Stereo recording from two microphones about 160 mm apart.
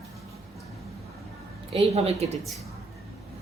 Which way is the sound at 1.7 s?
40° right (ahead or behind).